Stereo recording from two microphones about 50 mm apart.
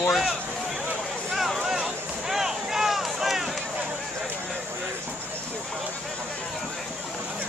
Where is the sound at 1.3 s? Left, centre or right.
Centre.